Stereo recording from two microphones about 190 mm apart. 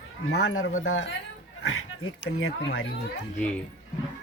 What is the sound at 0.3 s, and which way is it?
Speech, 80° left.